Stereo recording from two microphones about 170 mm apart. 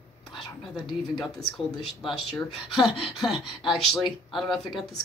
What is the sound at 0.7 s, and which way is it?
Speech, centre (ahead or behind).